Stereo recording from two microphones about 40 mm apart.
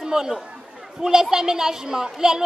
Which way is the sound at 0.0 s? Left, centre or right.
Centre.